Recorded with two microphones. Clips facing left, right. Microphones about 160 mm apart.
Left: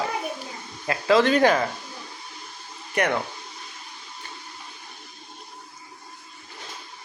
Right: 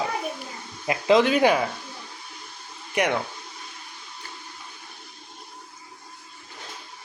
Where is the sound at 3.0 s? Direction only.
10° right (ahead or behind).